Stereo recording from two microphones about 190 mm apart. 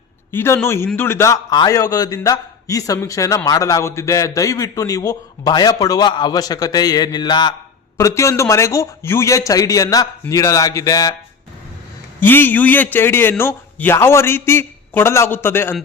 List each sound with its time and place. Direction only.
0.3 s a man's voice: 15° left (ahead or behind)
12.2 s a man's voice: 10° left (ahead or behind)